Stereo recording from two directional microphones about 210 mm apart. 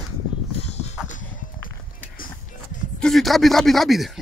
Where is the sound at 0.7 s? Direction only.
30° left (ahead or behind).